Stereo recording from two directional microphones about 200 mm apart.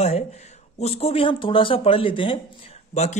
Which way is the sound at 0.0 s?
30° left (ahead or behind).